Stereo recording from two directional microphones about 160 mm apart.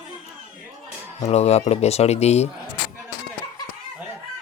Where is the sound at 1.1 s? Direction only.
45° left (ahead or behind).